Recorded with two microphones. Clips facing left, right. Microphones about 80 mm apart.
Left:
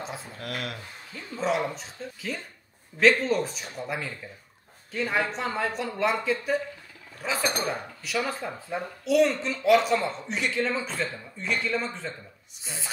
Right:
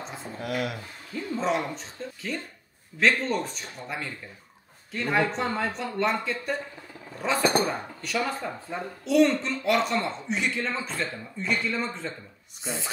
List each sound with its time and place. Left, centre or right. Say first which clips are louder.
0.0 s speech: right 1 dB; centre